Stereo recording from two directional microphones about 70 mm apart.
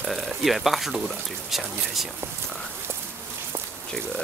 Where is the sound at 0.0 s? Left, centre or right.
Centre.